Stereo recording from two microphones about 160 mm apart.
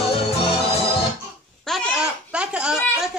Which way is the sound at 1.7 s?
5° right (ahead or behind).